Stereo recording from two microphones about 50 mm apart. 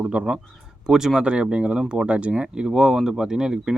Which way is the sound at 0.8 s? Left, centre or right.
Centre.